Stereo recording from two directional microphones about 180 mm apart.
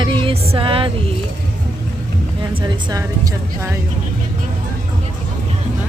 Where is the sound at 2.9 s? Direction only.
20° right (ahead or behind).